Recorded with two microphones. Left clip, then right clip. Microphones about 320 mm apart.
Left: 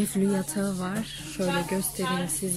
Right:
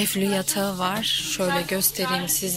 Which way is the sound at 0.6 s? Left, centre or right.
Right.